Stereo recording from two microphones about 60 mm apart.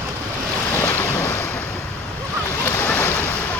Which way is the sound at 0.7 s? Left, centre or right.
Left.